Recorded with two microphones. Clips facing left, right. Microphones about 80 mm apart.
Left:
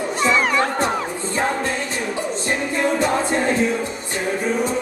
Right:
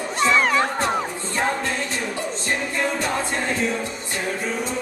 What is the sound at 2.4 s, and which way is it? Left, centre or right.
Music, centre.